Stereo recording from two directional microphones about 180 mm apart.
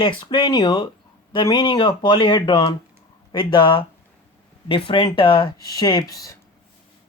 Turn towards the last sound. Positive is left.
turn(degrees=20)  # may be behind; listen again after turning